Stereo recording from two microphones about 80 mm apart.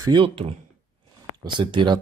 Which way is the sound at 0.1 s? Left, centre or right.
Right.